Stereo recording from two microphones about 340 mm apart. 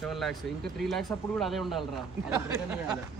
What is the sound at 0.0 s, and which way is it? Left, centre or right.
Speech, centre.